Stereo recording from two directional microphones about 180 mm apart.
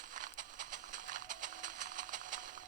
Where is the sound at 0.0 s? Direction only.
45° right (ahead or behind).